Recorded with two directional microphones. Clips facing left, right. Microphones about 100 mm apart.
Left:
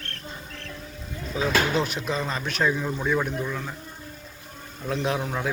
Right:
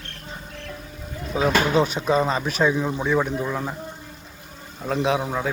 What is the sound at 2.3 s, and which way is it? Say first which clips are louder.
Speech: right 4 dB; 5° right (ahead or behind).